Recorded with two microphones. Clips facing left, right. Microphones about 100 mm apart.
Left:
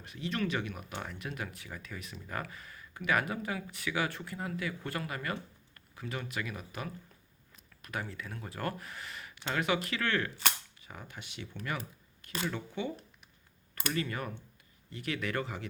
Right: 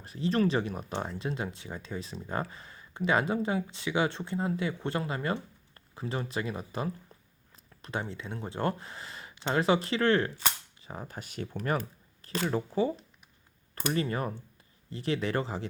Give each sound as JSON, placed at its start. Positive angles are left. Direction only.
{"t": 0.0, "sound": "speech", "side_deg": -35}